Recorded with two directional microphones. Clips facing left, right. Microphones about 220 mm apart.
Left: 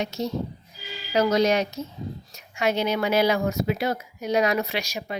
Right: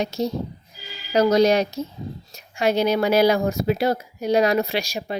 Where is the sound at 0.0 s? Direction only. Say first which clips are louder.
Right 3 dB; 35° right (ahead or behind).